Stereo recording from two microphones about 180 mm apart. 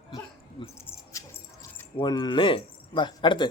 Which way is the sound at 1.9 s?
25° left (ahead or behind).